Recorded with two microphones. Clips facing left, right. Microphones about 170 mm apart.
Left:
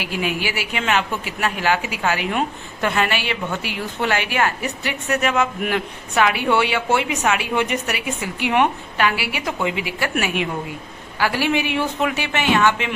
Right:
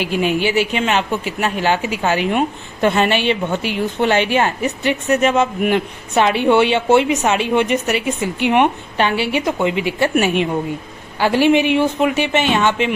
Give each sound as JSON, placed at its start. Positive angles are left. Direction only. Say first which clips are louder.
{"t": 0.0, "sound": "a woman's voice", "louder": "right 7 dB", "side_deg": -25}